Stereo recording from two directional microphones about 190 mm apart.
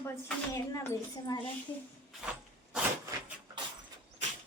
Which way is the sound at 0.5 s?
15° left (ahead or behind).